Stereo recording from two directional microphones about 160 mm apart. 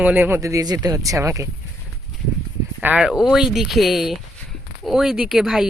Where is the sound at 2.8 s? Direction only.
10° right (ahead or behind).